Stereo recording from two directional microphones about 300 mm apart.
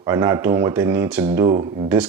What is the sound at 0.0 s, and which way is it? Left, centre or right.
Speech, centre.